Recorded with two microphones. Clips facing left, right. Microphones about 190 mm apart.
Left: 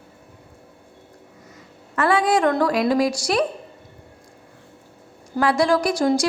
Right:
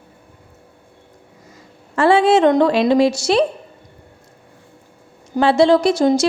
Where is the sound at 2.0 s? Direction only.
25° right (ahead or behind).